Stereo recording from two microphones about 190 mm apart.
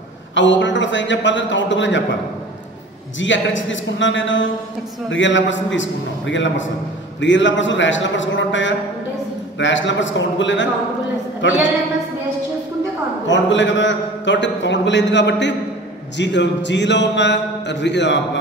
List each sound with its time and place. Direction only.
0.3 s a man's voice: 75° left (ahead or behind)
3.2 s a man's voice: 80° left
13.3 s a man's voice: 75° left (ahead or behind)